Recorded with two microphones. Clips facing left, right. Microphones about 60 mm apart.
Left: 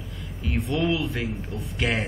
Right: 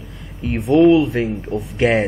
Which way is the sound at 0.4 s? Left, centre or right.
Right.